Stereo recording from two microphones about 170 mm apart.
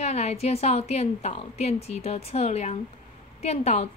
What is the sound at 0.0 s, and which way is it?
A woman's voice, 40° left (ahead or behind).